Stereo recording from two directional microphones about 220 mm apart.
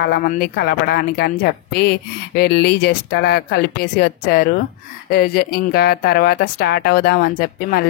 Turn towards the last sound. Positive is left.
turn(degrees=45)  # may be behind; listen again after turning